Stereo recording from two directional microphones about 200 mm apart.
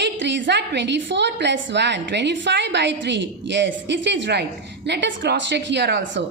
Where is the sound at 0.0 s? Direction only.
60° right (ahead or behind).